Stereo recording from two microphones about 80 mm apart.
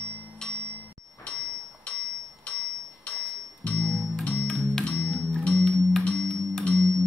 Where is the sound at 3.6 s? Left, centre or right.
Centre.